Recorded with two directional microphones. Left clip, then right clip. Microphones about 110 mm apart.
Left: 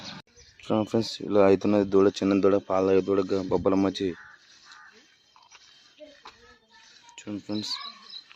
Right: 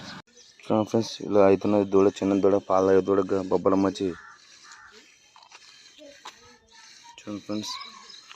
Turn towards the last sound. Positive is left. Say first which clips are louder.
# even
turn(degrees=20)  # may be behind; listen again after turning